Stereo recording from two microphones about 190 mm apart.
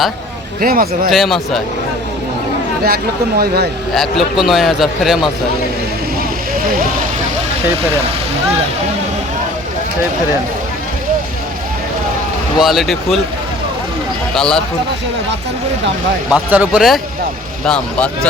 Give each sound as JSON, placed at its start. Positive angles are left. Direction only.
{"t": 0.6, "sound": "speech", "side_deg": -50}
{"t": 1.1, "sound": "a man's voice", "side_deg": 0}
{"t": 2.8, "sound": "speech", "side_deg": -55}
{"t": 3.9, "sound": "a man's voice", "side_deg": 0}
{"t": 12.5, "sound": "a man's voice", "side_deg": 0}
{"t": 14.3, "sound": "a man's voice", "side_deg": 0}
{"t": 16.3, "sound": "a man's voice", "side_deg": -5}